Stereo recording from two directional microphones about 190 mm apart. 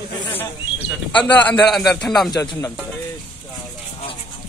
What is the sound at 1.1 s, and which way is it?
A man's voice, 10° left (ahead or behind).